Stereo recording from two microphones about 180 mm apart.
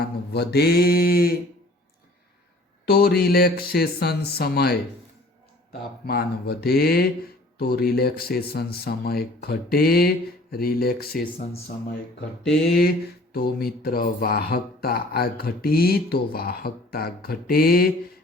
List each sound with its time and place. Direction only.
0.0 s speech: 60° left (ahead or behind)
2.8 s speech: 60° left (ahead or behind)
6.1 s speech: 60° left (ahead or behind)
13.3 s speech: 55° left (ahead or behind)